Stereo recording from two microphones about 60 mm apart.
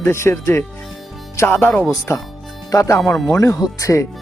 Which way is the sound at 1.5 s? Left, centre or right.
Left.